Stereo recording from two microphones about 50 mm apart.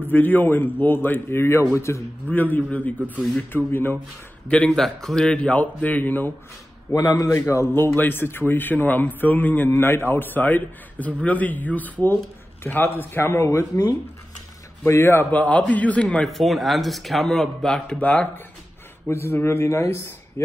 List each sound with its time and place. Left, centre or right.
0.0 s a man's voice: left
2.2 s a man's voice: left
4.5 s a man's voice: left
4.7 s a man's voice: centre
5.5 s a man's voice: left
6.9 s a man's voice: left
7.7 s a man's voice: left
9.7 s a man's voice: left
13.2 s a man's voice: left
14.9 s a man's voice: left
15.3 s a man's voice: left
16.3 s a man's voice: centre
17.9 s a man's voice: left
19.0 s a man's voice: left